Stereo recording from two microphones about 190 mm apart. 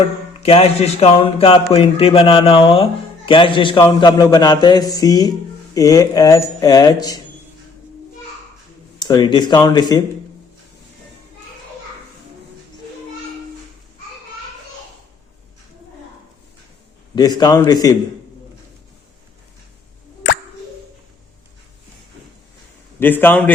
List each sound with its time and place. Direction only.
0.4 s speech: 30° left (ahead or behind)
9.0 s speech: 20° left (ahead or behind)
17.2 s speech: 20° left (ahead or behind)
23.0 s a man's voice: 10° left (ahead or behind)